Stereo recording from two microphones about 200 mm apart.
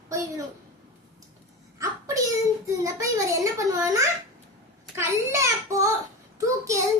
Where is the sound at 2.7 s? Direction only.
15° right (ahead or behind).